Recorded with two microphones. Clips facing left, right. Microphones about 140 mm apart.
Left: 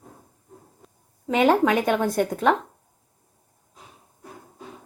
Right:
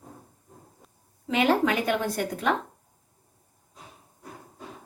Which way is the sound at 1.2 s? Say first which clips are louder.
Left 4 dB; 45° left (ahead or behind).